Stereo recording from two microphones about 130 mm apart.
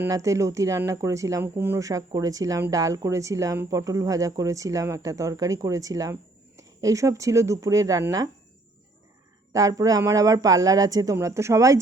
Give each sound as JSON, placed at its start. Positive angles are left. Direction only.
{"t": 0.1, "sound": "speech", "side_deg": -25}
{"t": 9.5, "sound": "speech", "side_deg": -25}